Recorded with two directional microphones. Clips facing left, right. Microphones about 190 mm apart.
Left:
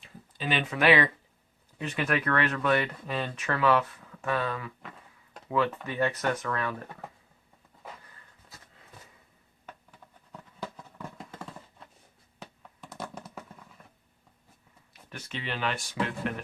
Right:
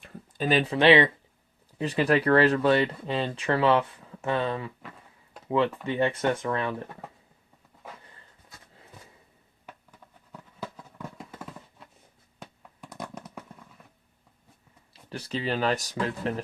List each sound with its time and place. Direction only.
0.0 s speech: 45° right (ahead or behind); by 6.8 s 25° right (ahead or behind)
10.6 s a sound: 5° right (ahead or behind)
15.1 s speech: 35° right (ahead or behind)